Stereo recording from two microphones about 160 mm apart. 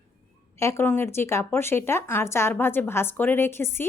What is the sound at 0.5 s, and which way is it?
A woman's voice, 15° left (ahead or behind).